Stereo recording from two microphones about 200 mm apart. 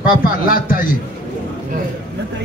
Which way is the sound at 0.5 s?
45° left (ahead or behind).